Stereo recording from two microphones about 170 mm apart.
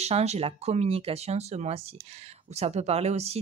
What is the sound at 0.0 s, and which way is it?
Speech, 40° right (ahead or behind).